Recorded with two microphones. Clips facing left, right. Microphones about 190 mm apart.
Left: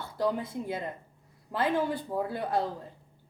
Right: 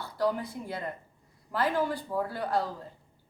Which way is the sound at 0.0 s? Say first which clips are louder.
Even; 20° left (ahead or behind).